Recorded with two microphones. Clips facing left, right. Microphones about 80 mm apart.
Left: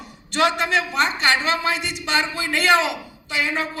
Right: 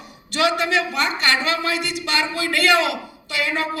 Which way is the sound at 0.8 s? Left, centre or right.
Right.